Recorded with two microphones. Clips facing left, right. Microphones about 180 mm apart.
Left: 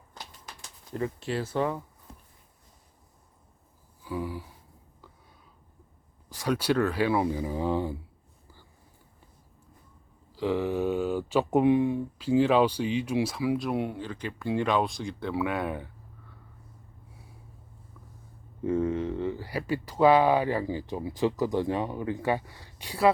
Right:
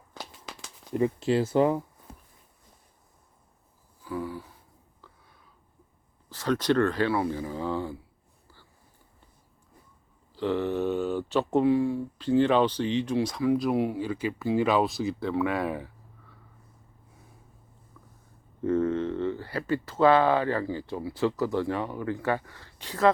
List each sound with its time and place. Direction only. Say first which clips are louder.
0.9 s speech: right 6 dB; 25° right (ahead or behind)
4.0 s a sound: even; 15° left (ahead or behind)
6.2 s speech: right 2 dB; 10° left (ahead or behind)
10.3 s speech: even; 5° left (ahead or behind)
12.1 s speech: even; 10° left (ahead or behind)
18.6 s speech: right 2 dB; 10° left (ahead or behind)